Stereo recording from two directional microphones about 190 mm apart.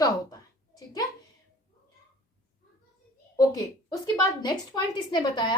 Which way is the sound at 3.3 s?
20° left (ahead or behind).